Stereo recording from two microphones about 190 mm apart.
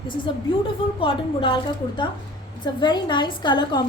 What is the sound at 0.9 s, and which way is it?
A woman's voice, 25° left (ahead or behind).